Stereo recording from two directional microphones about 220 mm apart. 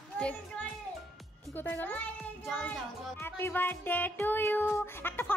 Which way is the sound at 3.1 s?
10° left (ahead or behind).